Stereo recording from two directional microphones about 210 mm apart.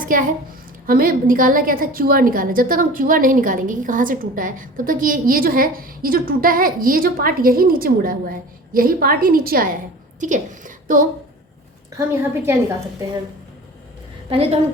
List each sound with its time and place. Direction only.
0.0 s a child's voice: 40° right (ahead or behind)
11.9 s a woman's voice: 10° right (ahead or behind)